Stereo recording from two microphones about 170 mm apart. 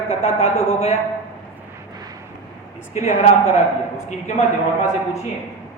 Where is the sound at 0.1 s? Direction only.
35° left (ahead or behind).